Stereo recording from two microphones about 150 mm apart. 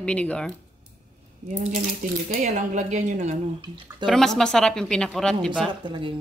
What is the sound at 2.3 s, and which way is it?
Speech, 60° right (ahead or behind).